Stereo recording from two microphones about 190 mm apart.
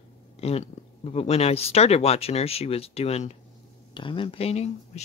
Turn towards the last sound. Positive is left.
turn(degrees=35)  # may be behind; listen again after turning